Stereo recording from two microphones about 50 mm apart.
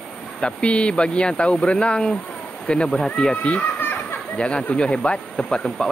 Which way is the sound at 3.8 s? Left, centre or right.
Left.